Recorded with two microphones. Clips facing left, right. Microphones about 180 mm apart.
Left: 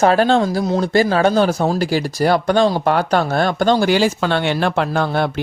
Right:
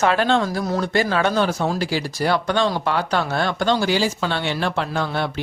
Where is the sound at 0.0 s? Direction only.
35° left (ahead or behind).